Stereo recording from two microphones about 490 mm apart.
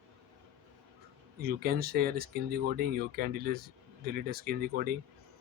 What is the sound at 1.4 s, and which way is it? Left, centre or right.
Speech, centre.